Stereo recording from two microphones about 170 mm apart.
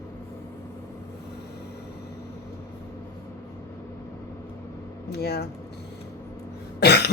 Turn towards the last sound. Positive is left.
turn(degrees=70)  # may be behind; listen again after turning